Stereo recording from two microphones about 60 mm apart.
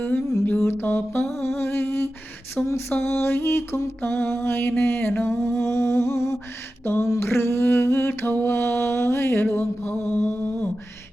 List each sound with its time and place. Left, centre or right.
0.0 s music: left
1.4 s humming: left
2.6 s a sound: centre
3.0 s music: left
5.2 s mantra: left
6.8 s music: left
7.2 s mantra: left